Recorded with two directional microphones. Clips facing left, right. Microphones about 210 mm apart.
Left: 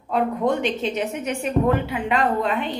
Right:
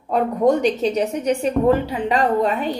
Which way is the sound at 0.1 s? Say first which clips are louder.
Right 4 dB; 40° right (ahead or behind).